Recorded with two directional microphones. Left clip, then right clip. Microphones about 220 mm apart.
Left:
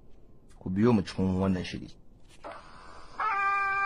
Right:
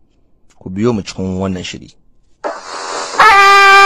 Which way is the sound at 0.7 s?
30° right (ahead or behind).